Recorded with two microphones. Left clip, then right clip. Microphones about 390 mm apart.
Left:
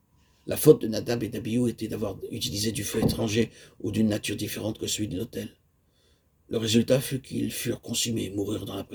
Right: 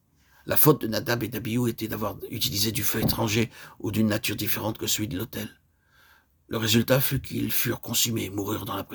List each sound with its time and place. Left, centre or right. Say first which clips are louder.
0.4 s speech: left 3 dB; right